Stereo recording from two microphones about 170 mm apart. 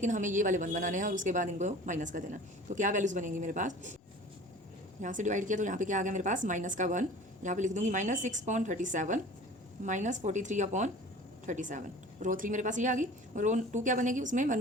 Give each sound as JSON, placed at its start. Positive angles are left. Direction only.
{"t": 0.0, "sound": "a woman's voice", "side_deg": -45}
{"t": 5.0, "sound": "a woman's voice", "side_deg": -45}